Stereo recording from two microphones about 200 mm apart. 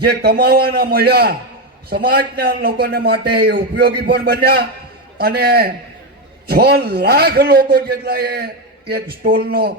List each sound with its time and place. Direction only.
0.0 s a man's voice: 50° right (ahead or behind)